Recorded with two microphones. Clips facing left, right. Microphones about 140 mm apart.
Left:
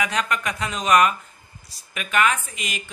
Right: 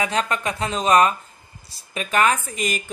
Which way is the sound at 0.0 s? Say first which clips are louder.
Right 2 dB; 30° right (ahead or behind).